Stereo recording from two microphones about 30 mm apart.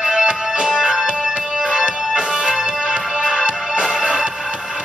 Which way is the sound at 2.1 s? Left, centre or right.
Centre.